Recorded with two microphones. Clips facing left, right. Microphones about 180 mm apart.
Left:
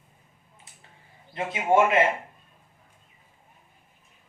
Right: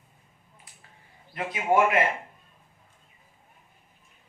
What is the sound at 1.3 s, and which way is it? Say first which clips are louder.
Speech: left 2 dB; 25° left (ahead or behind).